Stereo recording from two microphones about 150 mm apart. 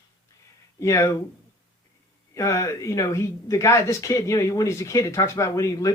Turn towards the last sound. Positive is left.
turn(degrees=20)  # may be behind; listen again after turning